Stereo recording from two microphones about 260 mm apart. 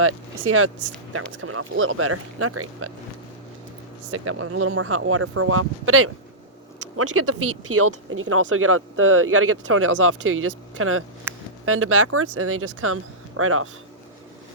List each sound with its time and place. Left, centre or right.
0.0 s speech: right
4.1 s speech: right
11.3 s a sound: centre
11.6 s speech: right